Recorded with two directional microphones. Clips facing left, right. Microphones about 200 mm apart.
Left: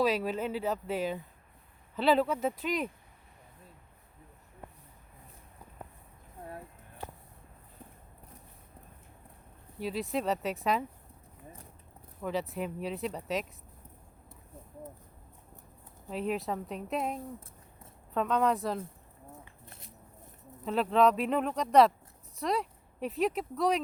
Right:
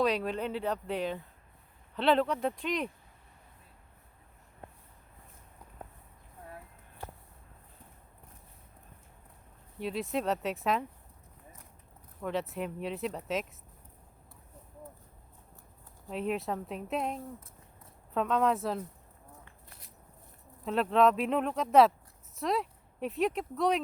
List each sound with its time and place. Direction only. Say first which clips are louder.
0.0 s speech: left 1 dB; 5° left (ahead or behind)
9.7 s speech: even; centre (ahead or behind)
12.2 s speech: even; centre (ahead or behind)
16.0 s speech: even; centre (ahead or behind)
20.4 s speech: even; centre (ahead or behind)